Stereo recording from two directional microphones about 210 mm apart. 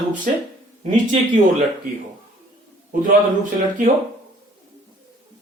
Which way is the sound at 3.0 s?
40° right (ahead or behind).